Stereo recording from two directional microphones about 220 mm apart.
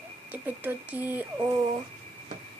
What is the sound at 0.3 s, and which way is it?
Speech, 10° right (ahead or behind).